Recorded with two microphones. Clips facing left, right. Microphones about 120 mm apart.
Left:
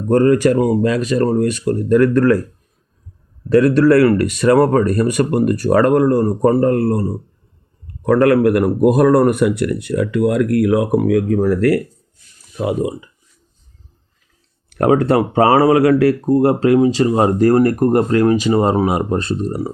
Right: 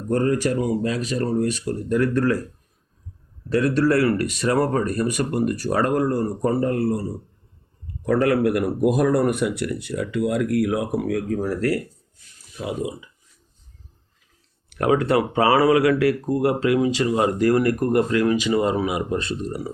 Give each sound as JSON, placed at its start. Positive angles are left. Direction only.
{"t": 0.1, "sound": "speech", "side_deg": 70}
{"t": 3.5, "sound": "speech", "side_deg": 65}
{"t": 12.5, "sound": "speech", "side_deg": 60}
{"t": 14.7, "sound": "speech", "side_deg": 40}